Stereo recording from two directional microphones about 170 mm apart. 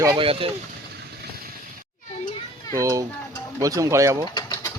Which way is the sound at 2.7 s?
20° right (ahead or behind).